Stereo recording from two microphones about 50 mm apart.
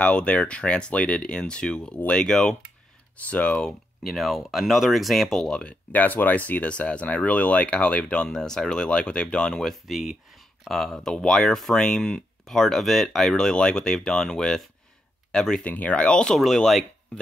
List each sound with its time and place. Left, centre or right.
0.0 s speech: left
3.3 s speech: left
4.0 s speech: centre
5.5 s speech: left
5.9 s speech: left; by 9.6 s centre
9.6 s speech: centre
10.7 s speech: centre
15.6 s speech: left